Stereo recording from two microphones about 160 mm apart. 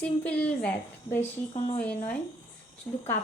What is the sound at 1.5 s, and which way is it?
Speech, 40° left (ahead or behind).